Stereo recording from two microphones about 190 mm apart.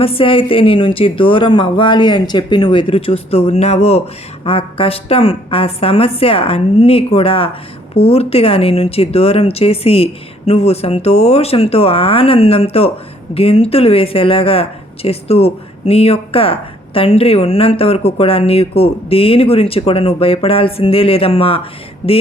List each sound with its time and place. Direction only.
0.0 s speech: 30° left (ahead or behind)